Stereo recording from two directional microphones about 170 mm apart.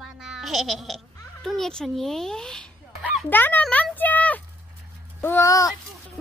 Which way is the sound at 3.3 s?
10° left (ahead or behind).